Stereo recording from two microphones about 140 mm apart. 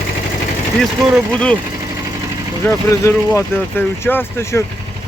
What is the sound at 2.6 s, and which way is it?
Speech, 20° left (ahead or behind).